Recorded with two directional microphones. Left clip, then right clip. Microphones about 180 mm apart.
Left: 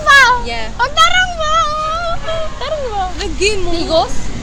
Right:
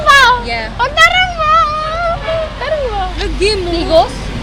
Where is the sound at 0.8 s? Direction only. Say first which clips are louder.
Right 2 dB; 20° left (ahead or behind).